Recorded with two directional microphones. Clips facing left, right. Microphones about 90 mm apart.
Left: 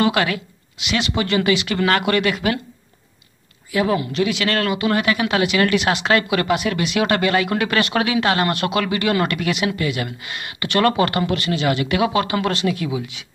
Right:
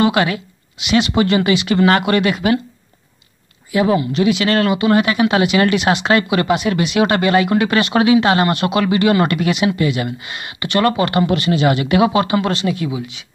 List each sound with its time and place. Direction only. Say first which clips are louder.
0.0 s speech: right 3 dB; 15° right (ahead or behind)
1.5 s speech: right 3 dB; 5° right (ahead or behind)
1.8 s speech: right 4 dB; 20° right (ahead or behind)
3.7 s speech: right 4 dB; 15° right (ahead or behind)
6.5 s speech: right 3 dB; 25° right (ahead or behind)
6.8 s speech: right 3 dB; 10° right (ahead or behind)